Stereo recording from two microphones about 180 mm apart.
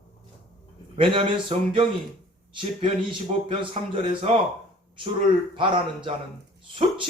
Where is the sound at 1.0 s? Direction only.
30° right (ahead or behind).